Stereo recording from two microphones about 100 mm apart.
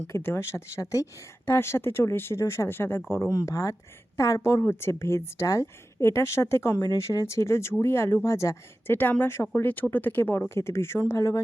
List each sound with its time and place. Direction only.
0.1 s a woman's voice: 25° left (ahead or behind)